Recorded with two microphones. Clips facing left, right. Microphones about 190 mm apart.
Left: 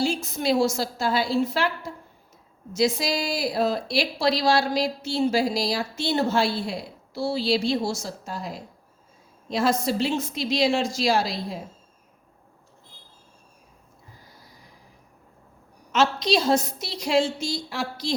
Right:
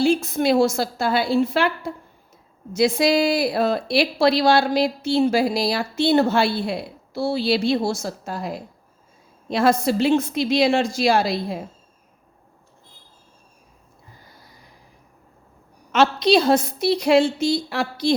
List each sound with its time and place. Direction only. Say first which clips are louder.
0.0 s speech: right 6 dB; 55° right (ahead or behind)
15.9 s speech: right 5 dB; 60° right (ahead or behind)